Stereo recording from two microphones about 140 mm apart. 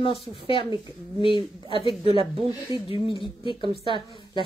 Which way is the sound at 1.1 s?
35° left (ahead or behind).